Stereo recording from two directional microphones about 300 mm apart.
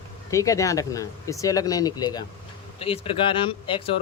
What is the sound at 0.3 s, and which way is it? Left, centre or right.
Speech, centre.